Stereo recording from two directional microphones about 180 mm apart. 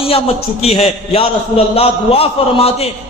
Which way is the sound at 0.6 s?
35° left (ahead or behind).